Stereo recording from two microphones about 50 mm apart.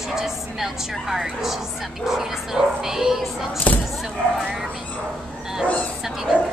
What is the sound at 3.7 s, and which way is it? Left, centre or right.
Speech, left.